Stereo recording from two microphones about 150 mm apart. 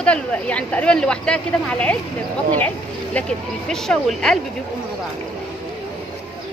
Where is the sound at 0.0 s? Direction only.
10° left (ahead or behind).